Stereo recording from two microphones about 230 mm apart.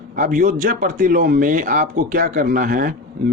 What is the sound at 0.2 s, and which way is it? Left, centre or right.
A man's voice, right.